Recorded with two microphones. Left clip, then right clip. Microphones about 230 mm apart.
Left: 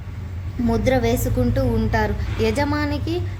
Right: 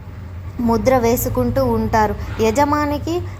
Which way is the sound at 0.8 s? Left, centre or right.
Centre.